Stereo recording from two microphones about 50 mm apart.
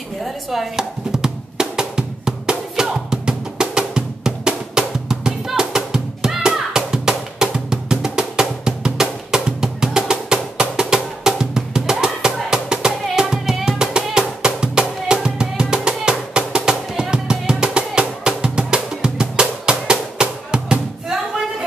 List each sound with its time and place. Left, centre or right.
0.2 s music: centre